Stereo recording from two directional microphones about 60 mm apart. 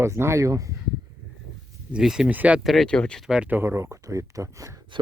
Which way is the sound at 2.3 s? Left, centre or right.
Right.